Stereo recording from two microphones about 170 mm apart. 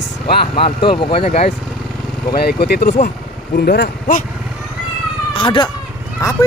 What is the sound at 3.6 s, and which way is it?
Speech, 70° left (ahead or behind).